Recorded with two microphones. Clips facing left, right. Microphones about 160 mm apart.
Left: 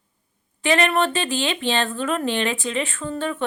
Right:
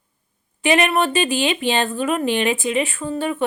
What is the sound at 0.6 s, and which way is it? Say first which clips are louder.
Speech: right 2 dB; 15° right (ahead or behind).